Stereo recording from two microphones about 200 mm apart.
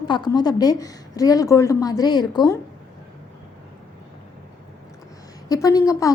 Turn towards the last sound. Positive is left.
turn(degrees=15)  # may be behind; listen again after turning